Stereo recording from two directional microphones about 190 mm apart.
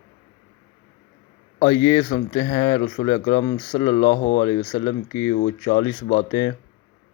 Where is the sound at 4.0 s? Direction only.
65° left (ahead or behind).